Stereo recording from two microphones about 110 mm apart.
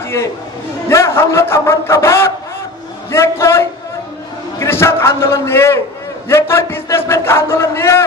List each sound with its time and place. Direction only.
0.8 s a man's voice: 25° left (ahead or behind)